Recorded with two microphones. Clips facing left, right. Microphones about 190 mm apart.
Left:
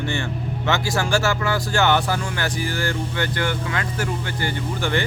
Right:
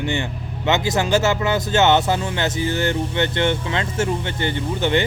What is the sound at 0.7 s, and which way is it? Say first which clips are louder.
Speech: right 3 dB; 20° right (ahead or behind).